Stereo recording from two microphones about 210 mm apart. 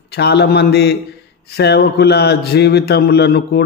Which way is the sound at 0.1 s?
55° left (ahead or behind).